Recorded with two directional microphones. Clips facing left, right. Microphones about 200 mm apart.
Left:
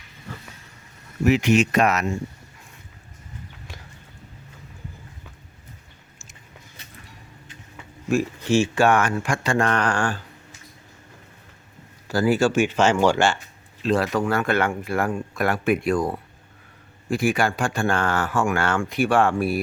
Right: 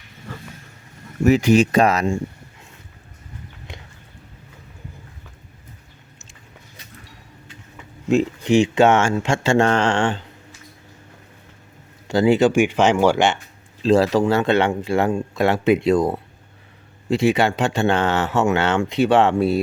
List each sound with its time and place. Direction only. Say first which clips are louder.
1.2 s speech: right 4 dB; 40° right (ahead or behind)
3.7 s a sound: right 5 dB; 20° right (ahead or behind)
8.1 s speech: right 4 dB; 20° right (ahead or behind)
12.0 s speech: right 4 dB; 25° right (ahead or behind)
13.8 s speech: right 6 dB; 30° right (ahead or behind)